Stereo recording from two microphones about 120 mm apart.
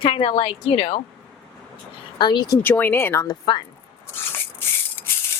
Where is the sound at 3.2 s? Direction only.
40° left (ahead or behind).